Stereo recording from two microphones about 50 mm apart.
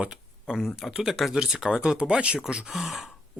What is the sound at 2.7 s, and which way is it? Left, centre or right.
Speech, centre.